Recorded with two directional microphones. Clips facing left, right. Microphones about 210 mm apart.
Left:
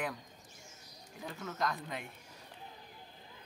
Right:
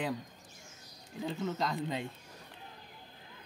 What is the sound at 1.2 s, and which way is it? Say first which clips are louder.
Speech: right 4 dB; 25° right (ahead or behind).